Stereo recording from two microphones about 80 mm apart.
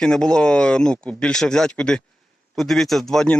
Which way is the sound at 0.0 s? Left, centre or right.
Centre.